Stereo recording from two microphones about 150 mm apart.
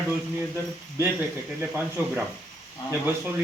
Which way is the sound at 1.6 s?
15° right (ahead or behind).